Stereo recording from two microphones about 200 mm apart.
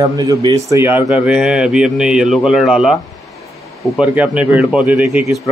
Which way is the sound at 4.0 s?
5° right (ahead or behind).